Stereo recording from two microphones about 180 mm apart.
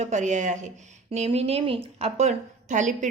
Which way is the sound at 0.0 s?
40° right (ahead or behind).